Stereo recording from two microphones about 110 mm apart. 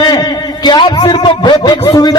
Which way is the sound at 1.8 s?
30° left (ahead or behind).